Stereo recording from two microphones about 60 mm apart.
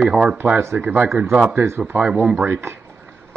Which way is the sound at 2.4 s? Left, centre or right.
Right.